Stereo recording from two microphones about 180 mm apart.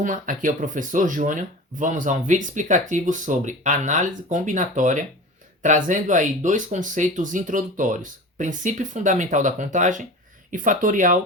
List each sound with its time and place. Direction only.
0.0 s speech: 45° right (ahead or behind)